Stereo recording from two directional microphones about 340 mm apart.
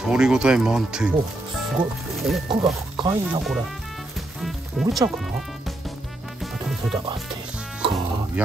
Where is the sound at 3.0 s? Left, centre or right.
Centre.